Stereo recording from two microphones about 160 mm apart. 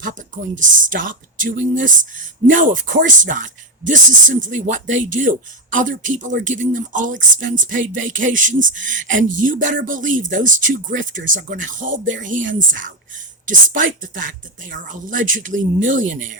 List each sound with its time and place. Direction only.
0.0 s speech: 55° right (ahead or behind)